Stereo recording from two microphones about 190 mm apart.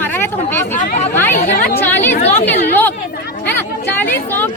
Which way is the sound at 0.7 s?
40° left (ahead or behind).